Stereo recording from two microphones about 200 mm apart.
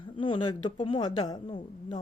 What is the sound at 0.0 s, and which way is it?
A woman's voice, 25° left (ahead or behind).